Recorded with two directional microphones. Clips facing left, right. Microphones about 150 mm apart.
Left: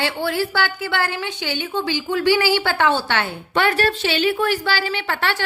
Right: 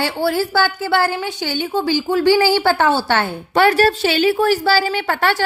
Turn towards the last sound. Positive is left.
turn(degrees=-45)  # may be behind; listen again after turning